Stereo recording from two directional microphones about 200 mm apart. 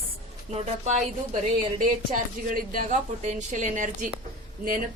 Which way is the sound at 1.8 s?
45° right (ahead or behind).